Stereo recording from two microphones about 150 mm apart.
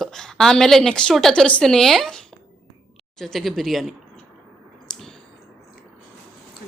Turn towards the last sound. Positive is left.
turn(degrees=5)  # may be behind; listen again after turning